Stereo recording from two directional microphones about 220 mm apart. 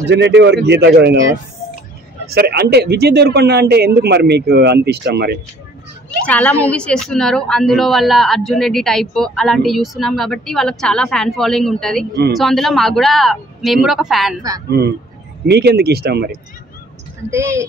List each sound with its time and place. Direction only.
0.1 s a man's voice: 50° right (ahead or behind)
2.2 s a man's voice: 45° right (ahead or behind)
6.2 s a woman's voice: 5° left (ahead or behind)
14.8 s a man's voice: 45° right (ahead or behind)
17.3 s a woman's voice: 10° right (ahead or behind)